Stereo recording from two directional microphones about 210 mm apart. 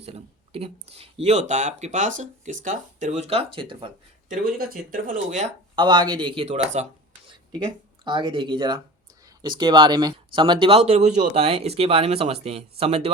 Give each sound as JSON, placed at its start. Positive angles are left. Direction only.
{"t": 0.0, "sound": "speech", "side_deg": -30}
{"t": 4.3, "sound": "speech", "side_deg": -40}
{"t": 5.7, "sound": "speech", "side_deg": -20}
{"t": 7.6, "sound": "speech", "side_deg": -20}